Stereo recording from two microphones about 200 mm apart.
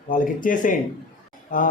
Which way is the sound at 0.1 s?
40° left (ahead or behind).